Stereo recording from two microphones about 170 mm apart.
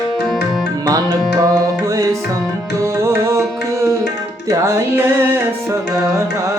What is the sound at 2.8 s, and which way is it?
Music, 15° right (ahead or behind).